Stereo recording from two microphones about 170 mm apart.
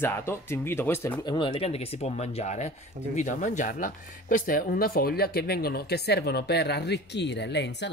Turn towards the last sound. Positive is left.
turn(degrees=90)